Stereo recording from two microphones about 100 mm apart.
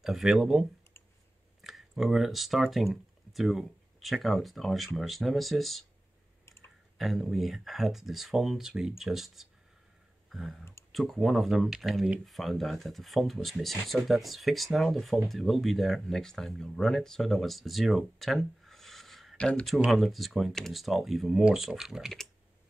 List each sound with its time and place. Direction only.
0.0 s speech: 5° right (ahead or behind)
7.0 s speech: centre (ahead or behind)
10.6 s speech: 25° left (ahead or behind)
10.9 s speech: centre (ahead or behind)
19.9 s speech: centre (ahead or behind)